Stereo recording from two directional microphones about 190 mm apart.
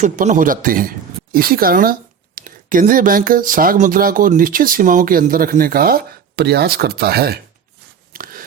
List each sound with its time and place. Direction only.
0.0 s speech: 40° right (ahead or behind)
8.1 s biting: 50° right (ahead or behind)